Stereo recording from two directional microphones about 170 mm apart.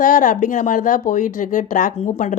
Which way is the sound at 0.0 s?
50° left (ahead or behind).